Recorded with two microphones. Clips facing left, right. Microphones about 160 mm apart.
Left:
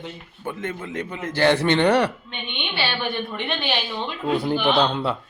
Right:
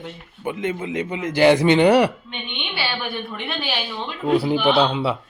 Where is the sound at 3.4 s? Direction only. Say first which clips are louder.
Left 1 dB; 5° right (ahead or behind).